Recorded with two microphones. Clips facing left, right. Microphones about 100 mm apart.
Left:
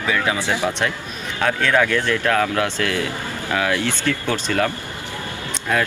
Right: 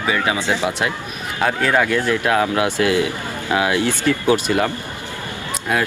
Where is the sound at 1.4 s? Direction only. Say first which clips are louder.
Right 1 dB; 10° right (ahead or behind).